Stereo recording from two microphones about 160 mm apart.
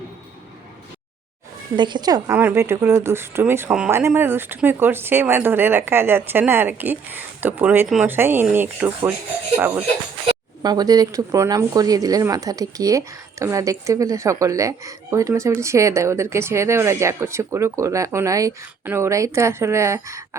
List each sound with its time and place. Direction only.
1.7 s speech: 30° right (ahead or behind); by 9.8 s 10° right (ahead or behind)
10.6 s a woman's voice: 25° right (ahead or behind)